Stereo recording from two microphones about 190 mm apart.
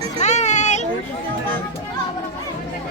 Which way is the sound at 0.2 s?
35° left (ahead or behind).